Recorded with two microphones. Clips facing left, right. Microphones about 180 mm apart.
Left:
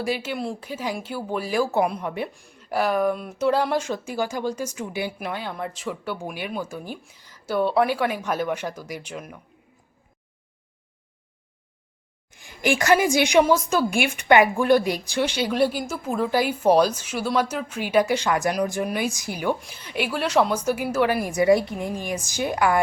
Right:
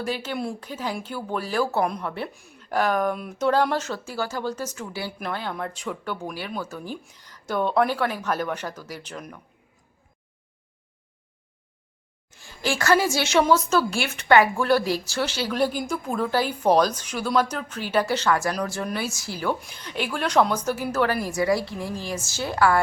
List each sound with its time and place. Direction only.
0.0 s speech: 10° left (ahead or behind)
2.2 s speech: centre (ahead or behind)
12.3 s speech: 15° left (ahead or behind)
15.8 s a woman's voice: 5° left (ahead or behind)
19.5 s speech: centre (ahead or behind)